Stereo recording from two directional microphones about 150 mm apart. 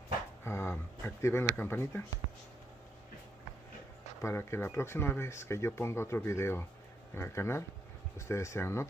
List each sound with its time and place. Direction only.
0.4 s speech: 15° left (ahead or behind)
4.2 s speech: 15° left (ahead or behind)